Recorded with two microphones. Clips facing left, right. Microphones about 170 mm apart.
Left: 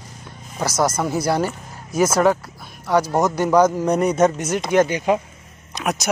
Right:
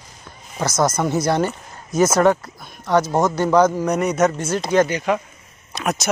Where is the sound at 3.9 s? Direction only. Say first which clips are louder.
Left 1 dB; 30° left (ahead or behind).